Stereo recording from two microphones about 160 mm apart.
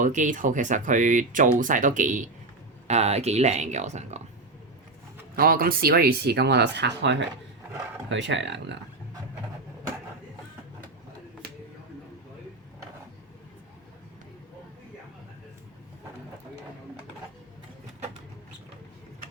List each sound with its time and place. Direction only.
0.0 s speech: 50° right (ahead or behind)
5.4 s speech: 65° right (ahead or behind); by 8.8 s 90° right